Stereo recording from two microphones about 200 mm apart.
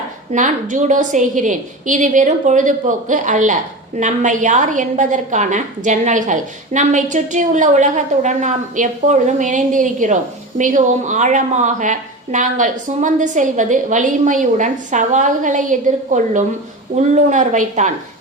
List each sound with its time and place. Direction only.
0.3 s a woman's voice: 40° right (ahead or behind)